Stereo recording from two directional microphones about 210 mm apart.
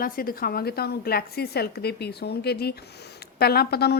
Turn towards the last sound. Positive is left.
turn(degrees=50)  # may be behind; listen again after turning